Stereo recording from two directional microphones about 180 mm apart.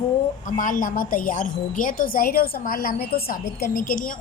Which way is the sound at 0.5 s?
45° left (ahead or behind).